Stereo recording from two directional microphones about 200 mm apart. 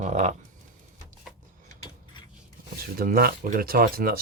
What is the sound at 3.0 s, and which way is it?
Speech, 45° right (ahead or behind).